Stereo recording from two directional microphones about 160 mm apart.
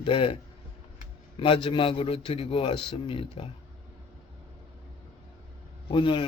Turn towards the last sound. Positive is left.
turn(degrees=30)  # may be behind; listen again after turning